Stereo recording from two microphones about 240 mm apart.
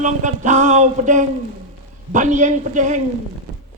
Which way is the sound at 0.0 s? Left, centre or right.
Right.